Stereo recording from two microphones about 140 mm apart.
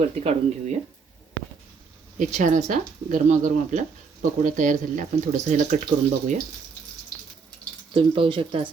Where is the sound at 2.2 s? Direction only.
60° right (ahead or behind).